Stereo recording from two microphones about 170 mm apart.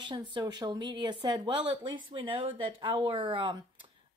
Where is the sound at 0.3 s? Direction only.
25° right (ahead or behind).